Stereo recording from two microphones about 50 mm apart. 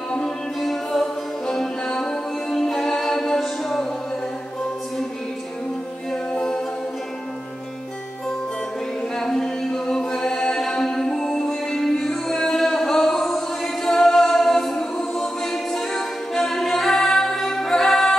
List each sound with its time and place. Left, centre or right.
0.6 s music: centre
6.3 s a capella: centre
9.2 s music: centre
13.8 s a capella: centre